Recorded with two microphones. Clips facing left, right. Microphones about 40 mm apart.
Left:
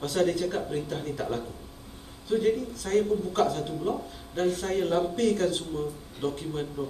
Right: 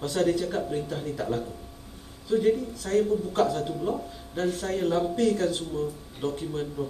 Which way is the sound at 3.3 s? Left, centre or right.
Centre.